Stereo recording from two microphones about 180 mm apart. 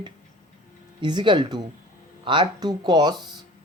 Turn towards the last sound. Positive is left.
turn(degrees=-25)  # may be behind; listen again after turning